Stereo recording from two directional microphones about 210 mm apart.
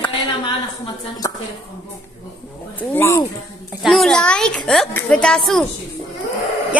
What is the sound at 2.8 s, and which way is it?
Speech, 10° left (ahead or behind).